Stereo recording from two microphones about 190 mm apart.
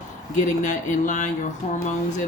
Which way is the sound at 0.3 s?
40° left (ahead or behind).